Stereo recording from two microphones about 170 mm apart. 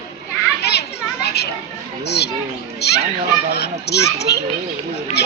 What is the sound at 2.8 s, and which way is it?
A child's voice, 70° left (ahead or behind).